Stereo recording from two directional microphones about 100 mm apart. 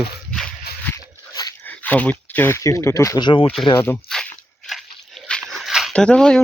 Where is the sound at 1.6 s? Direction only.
15° left (ahead or behind).